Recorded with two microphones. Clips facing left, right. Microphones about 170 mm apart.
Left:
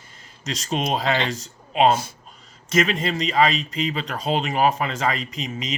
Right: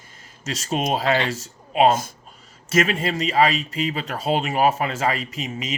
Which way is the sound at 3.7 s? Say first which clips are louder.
Even; 40° right (ahead or behind).